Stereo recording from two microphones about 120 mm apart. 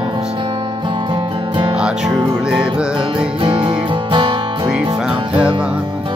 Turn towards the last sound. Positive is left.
turn(degrees=-45)  # may be behind; listen again after turning